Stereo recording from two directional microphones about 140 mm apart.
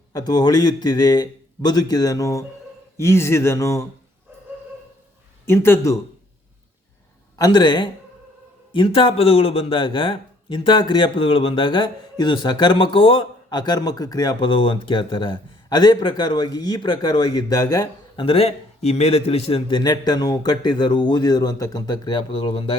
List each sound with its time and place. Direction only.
0.1 s a man's voice: 30° left (ahead or behind)
5.5 s speech: 15° left (ahead or behind)
7.3 s a man's voice: 30° left (ahead or behind)
18.2 s a man's voice: 40° left (ahead or behind)